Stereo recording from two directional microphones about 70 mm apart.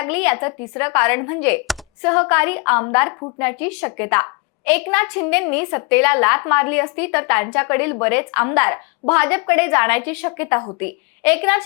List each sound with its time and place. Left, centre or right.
0.0 s a woman's voice: centre